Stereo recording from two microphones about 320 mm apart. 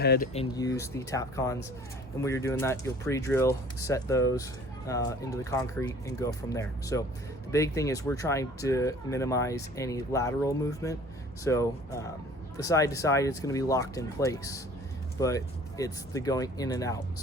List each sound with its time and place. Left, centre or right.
0.0 s speech: left
0.3 s speech: centre